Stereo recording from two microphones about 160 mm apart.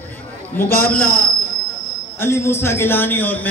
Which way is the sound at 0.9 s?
65° left (ahead or behind).